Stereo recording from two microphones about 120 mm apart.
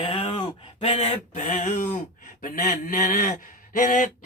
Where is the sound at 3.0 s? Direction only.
90° left.